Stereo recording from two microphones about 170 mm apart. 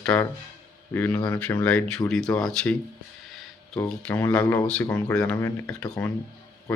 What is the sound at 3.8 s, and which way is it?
Speech, 10° left (ahead or behind).